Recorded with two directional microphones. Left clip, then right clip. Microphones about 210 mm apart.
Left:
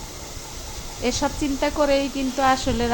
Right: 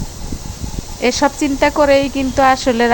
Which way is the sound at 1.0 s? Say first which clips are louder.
Right 9 dB; 30° right (ahead or behind).